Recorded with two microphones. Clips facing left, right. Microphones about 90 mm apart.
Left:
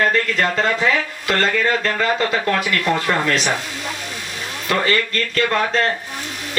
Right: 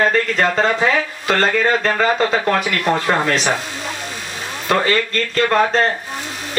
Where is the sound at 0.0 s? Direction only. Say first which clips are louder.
Right 2 dB; 25° right (ahead or behind).